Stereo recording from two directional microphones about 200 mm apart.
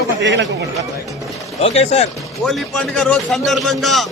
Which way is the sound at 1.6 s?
30° left (ahead or behind).